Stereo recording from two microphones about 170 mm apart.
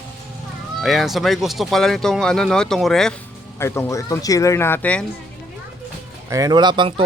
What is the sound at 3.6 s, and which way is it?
Speech, 15° left (ahead or behind).